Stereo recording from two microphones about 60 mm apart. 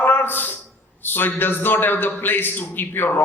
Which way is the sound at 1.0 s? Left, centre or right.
Left.